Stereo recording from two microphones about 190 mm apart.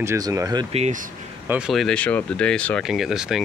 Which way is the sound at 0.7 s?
35° right (ahead or behind).